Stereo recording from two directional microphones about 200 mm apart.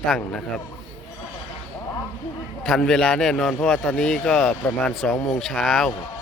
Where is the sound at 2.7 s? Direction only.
5° left (ahead or behind).